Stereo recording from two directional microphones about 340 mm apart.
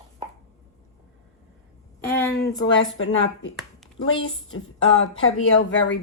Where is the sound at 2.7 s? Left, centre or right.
Left.